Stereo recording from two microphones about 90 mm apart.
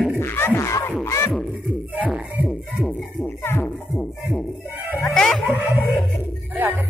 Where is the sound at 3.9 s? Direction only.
10° left (ahead or behind).